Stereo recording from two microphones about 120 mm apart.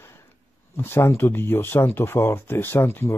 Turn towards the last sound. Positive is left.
turn(degrees=20)  # may be behind; listen again after turning